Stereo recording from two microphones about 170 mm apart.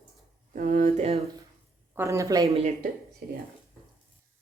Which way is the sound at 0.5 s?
50° right (ahead or behind).